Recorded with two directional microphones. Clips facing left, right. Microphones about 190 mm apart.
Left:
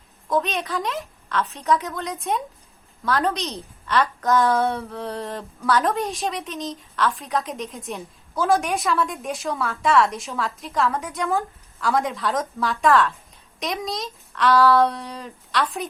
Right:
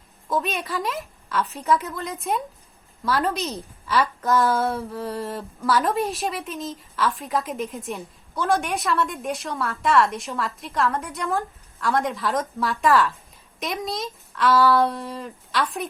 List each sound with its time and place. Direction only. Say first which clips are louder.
0.3 s a woman's voice: left 2 dB; 5° right (ahead or behind)